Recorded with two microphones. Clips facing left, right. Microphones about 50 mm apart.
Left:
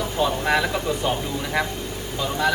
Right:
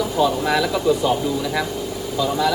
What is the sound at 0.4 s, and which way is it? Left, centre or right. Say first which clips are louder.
Speech: right 1 dB; left.